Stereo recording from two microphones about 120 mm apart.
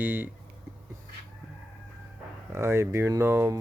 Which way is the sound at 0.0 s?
15° right (ahead or behind).